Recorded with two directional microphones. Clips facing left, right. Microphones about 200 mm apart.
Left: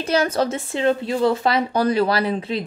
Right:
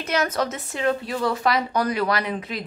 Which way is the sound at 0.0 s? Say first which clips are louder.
Left 4 dB; 30° left (ahead or behind).